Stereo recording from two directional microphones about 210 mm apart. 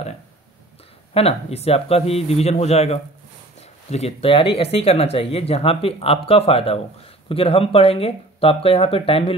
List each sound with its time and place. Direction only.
1.1 s speech: 30° left (ahead or behind)